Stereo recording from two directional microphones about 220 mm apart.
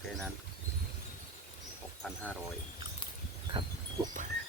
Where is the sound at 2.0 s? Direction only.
Centre (ahead or behind).